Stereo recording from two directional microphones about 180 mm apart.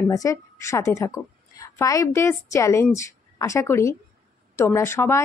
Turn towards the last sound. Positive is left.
turn(degrees=15)  # may be behind; listen again after turning